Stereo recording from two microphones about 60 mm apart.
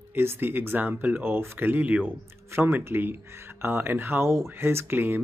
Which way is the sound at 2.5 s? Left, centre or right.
Right.